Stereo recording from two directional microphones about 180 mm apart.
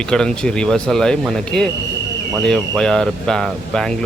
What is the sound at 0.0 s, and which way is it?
Speech, 5° left (ahead or behind).